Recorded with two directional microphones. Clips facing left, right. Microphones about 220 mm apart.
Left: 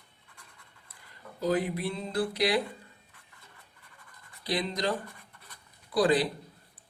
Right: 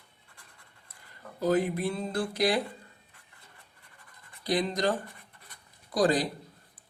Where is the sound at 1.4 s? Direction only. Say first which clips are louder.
Right 2 dB; 50° right (ahead or behind).